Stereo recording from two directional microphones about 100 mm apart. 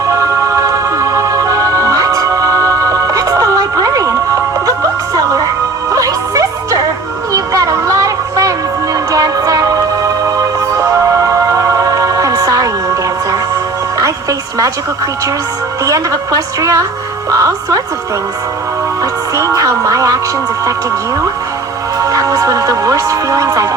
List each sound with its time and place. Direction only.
0.1 s music: 30° right (ahead or behind)
5.9 s music: 35° right (ahead or behind)
7.3 s a sound: 35° right (ahead or behind)
9.1 s music: 35° right (ahead or behind)
14.0 s music: 35° right (ahead or behind)
15.8 s a woman's voice: 35° right (ahead or behind)
19.4 s music: 35° right (ahead or behind)
21.9 s speech: 35° right (ahead or behind)